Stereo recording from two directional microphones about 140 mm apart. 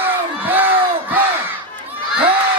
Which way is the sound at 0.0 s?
15° right (ahead or behind).